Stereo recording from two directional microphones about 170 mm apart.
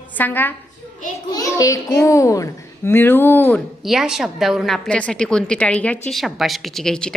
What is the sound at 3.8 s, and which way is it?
A woman's voice, centre (ahead or behind).